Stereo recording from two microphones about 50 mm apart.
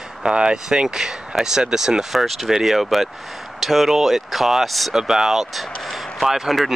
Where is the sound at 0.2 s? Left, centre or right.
Centre.